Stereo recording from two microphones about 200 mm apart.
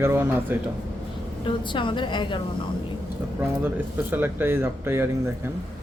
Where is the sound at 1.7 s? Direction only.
25° left (ahead or behind).